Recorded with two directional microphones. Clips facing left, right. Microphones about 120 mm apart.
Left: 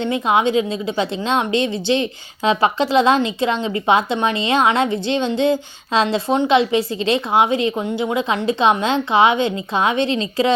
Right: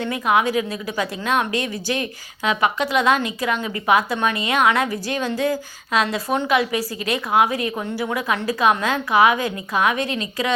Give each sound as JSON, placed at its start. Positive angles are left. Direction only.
{"t": 0.0, "sound": "a woman's voice", "side_deg": 25}